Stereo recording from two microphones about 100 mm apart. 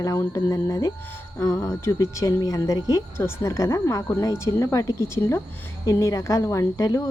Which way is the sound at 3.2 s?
25° left (ahead or behind).